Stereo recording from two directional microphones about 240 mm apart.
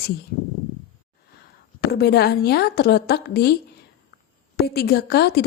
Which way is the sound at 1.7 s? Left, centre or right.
Left.